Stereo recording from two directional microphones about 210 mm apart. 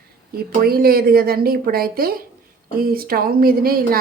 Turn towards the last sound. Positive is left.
turn(degrees=-45)  # may be behind; listen again after turning